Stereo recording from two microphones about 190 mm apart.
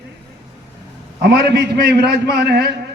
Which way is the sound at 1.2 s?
60° right (ahead or behind).